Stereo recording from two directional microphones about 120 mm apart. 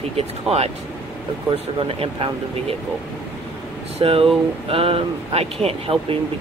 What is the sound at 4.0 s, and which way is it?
Speech, 50° right (ahead or behind).